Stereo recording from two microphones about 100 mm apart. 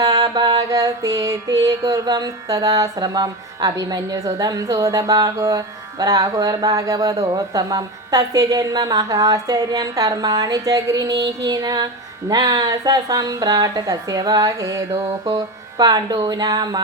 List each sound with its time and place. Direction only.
0.0 s music: 40° right (ahead or behind)